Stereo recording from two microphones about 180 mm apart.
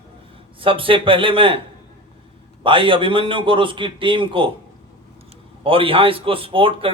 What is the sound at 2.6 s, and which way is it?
A man's voice, 30° right (ahead or behind).